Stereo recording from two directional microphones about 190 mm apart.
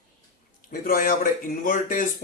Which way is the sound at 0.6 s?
50° left (ahead or behind).